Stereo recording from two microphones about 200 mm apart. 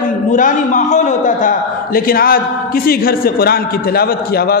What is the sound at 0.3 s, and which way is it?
A man's voice, 40° left (ahead or behind).